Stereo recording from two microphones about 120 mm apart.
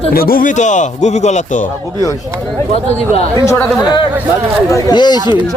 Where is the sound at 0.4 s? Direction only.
90° left.